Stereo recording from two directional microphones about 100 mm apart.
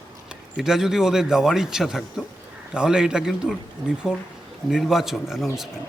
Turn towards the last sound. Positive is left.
turn(degrees=-5)  # may be behind; listen again after turning